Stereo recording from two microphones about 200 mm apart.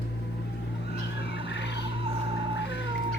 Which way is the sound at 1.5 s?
60° left (ahead or behind).